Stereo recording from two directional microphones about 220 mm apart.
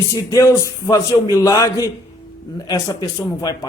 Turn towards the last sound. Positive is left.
turn(degrees=15)  # may be behind; listen again after turning